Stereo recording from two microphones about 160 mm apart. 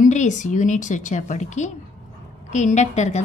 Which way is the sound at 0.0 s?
50° left (ahead or behind).